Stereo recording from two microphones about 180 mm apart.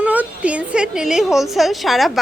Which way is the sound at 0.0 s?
10° right (ahead or behind).